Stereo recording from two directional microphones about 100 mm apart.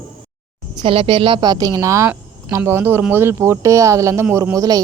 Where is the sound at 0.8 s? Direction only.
65° right (ahead or behind); by 4.8 s 40° right (ahead or behind).